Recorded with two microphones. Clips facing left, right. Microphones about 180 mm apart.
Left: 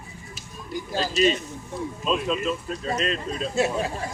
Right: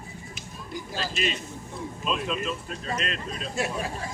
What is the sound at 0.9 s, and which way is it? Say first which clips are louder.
Speech: left 9 dB; 35° left (ahead or behind).